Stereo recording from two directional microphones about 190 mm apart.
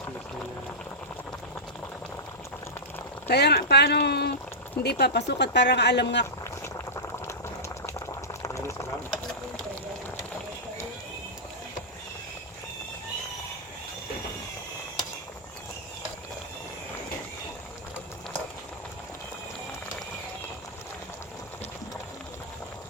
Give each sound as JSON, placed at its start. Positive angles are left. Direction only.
{"t": 3.2, "sound": "speech", "side_deg": 60}
{"t": 6.4, "sound": "boiling", "side_deg": 15}